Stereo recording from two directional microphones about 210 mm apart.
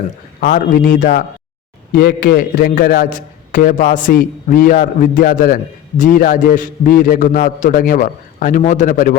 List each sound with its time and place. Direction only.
0.3 s a man's voice: 45° left (ahead or behind)